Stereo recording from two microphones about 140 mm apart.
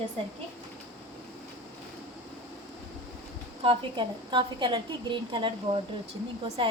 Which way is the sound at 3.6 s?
40° right (ahead or behind).